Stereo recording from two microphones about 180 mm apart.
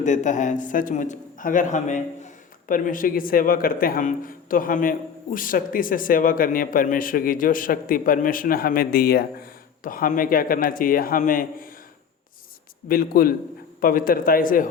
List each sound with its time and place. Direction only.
0.0 s a man's voice: 40° left (ahead or behind)
12.9 s a man's voice: 55° left (ahead or behind)